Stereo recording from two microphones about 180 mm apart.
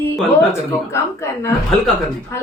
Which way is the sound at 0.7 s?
15° left (ahead or behind).